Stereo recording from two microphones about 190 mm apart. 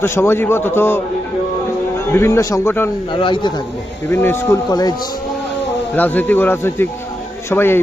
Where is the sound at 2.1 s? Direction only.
15° left (ahead or behind).